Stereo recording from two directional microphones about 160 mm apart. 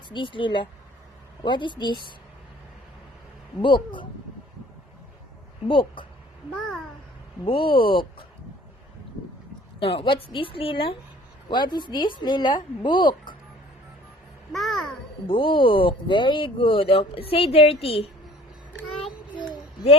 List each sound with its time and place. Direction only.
0.1 s speech: 30° left (ahead or behind)
3.6 s speech: 30° left (ahead or behind)
5.6 s speech: 30° left (ahead or behind)
6.5 s a child's voice: centre (ahead or behind)
7.4 s speech: 30° left (ahead or behind)
9.8 s speech: 35° left (ahead or behind)
14.5 s a sound: centre (ahead or behind)
15.3 s speech: 35° left (ahead or behind)